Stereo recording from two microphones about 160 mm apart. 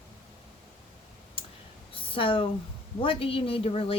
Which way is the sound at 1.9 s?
35° left (ahead or behind).